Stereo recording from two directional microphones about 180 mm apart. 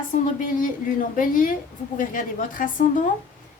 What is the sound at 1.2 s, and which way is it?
A woman's voice, 50° left (ahead or behind).